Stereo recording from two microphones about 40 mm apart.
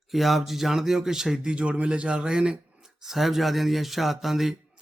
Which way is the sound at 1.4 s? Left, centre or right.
Right.